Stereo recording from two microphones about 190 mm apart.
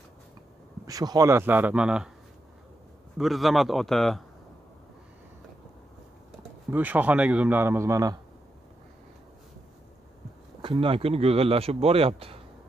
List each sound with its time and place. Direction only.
0.8 s speech: 20° right (ahead or behind)
3.2 s a man's voice: centre (ahead or behind)
6.7 s speech: 10° right (ahead or behind)
10.6 s speech: 25° right (ahead or behind)